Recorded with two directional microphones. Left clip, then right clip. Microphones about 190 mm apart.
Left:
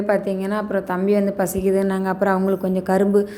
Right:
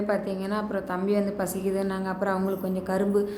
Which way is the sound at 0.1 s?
30° left (ahead or behind).